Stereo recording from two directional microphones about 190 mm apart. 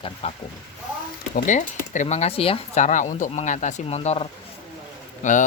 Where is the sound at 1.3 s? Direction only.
40° left (ahead or behind).